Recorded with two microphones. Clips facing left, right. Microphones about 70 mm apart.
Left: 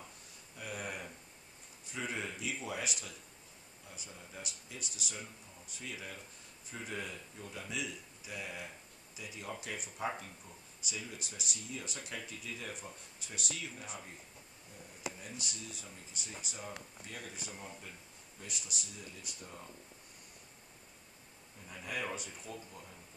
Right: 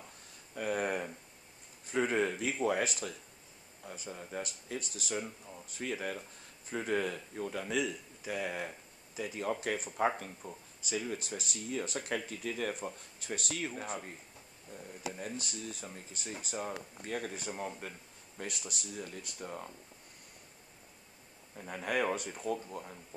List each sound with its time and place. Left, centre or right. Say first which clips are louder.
0.6 s a sound: right 9 dB; right
1.9 s speech: right 10 dB; right
5.8 s speech: right 9 dB; right
7.7 s speech: right 6 dB; right
12.1 s speech: right 8 dB; right
15.0 s speech: right 4 dB; right
21.5 s speech: right 8 dB; right